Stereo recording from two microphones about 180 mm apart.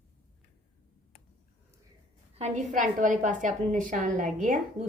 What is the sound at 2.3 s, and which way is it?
A woman's voice, 35° right (ahead or behind).